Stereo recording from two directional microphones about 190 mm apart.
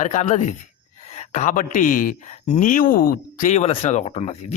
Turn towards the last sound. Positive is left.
turn(degrees=35)  # may be behind; listen again after turning